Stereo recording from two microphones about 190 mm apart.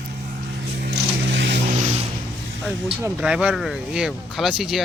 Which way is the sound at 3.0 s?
5° right (ahead or behind).